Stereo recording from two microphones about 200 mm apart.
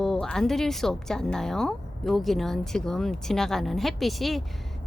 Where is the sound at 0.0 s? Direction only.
Centre (ahead or behind).